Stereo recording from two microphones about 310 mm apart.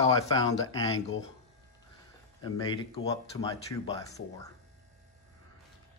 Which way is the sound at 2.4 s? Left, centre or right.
Centre.